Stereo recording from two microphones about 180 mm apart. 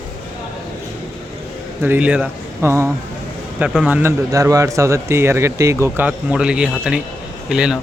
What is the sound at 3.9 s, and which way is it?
Speech, 10° right (ahead or behind).